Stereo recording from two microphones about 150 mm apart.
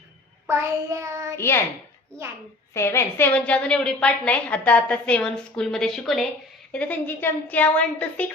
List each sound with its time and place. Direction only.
0.4 s child singing: 20° right (ahead or behind)
1.4 s a woman's voice: 15° left (ahead or behind)
2.7 s a woman's voice: 20° left (ahead or behind)